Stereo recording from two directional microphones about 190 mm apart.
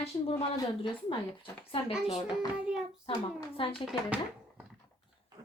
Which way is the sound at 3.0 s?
30° left (ahead or behind).